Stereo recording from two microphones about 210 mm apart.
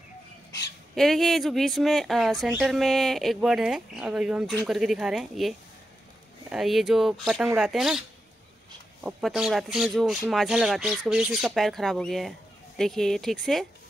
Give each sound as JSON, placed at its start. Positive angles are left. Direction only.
{"t": 0.9, "sound": "speech", "side_deg": 0}
{"t": 9.0, "sound": "speech", "side_deg": -5}